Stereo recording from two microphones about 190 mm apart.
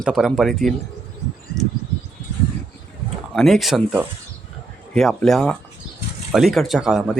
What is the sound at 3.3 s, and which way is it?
Speech, centre (ahead or behind).